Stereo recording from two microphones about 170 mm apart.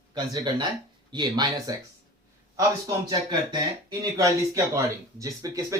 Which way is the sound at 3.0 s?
25° right (ahead or behind).